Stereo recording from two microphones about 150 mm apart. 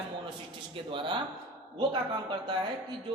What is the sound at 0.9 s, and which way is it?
Speech, 35° right (ahead or behind).